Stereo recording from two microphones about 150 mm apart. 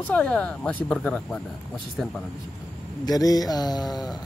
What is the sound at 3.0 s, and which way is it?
Mantra, 25° left (ahead or behind).